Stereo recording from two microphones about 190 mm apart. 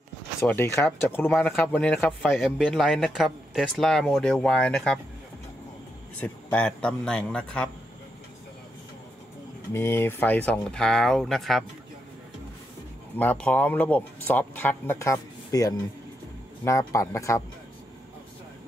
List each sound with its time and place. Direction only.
0.4 s a man's voice: 15° left (ahead or behind)
6.1 s a man's voice: 10° left (ahead or behind)
9.7 s a man's voice: 15° left (ahead or behind)
13.1 s speech: 10° left (ahead or behind)